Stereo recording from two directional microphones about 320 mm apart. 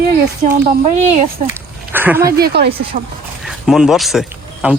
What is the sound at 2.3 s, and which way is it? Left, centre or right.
Speech, right.